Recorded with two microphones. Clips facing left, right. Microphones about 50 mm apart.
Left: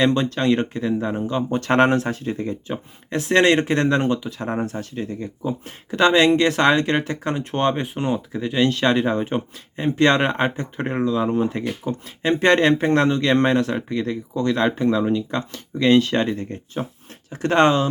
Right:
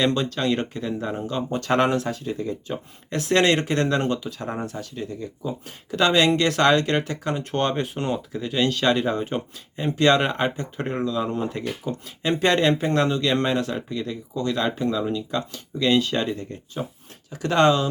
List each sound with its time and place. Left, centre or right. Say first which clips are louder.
0.0 s speech: left 3 dB; left
3.1 s speech: left 3 dB; left